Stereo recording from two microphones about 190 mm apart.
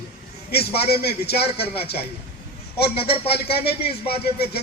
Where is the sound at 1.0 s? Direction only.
60° left (ahead or behind).